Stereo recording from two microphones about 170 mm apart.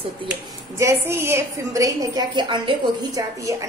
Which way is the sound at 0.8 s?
15° right (ahead or behind).